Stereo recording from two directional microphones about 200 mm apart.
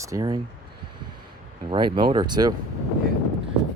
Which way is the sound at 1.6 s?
25° right (ahead or behind).